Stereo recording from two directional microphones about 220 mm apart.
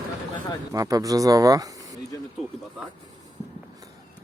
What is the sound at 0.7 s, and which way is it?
Speech, 15° right (ahead or behind).